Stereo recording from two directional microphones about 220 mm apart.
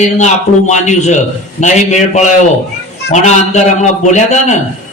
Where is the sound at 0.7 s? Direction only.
35° left (ahead or behind).